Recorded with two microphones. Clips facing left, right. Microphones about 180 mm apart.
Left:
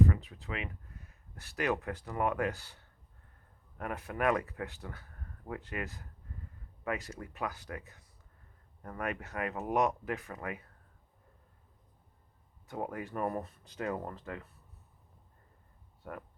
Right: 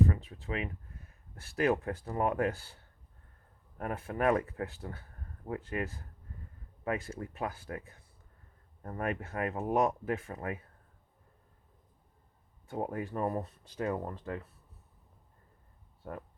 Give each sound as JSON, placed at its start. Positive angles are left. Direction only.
{"t": 0.0, "sound": "speech", "side_deg": -30}
{"t": 12.6, "sound": "speech", "side_deg": -30}
{"t": 16.0, "sound": "speech", "side_deg": -30}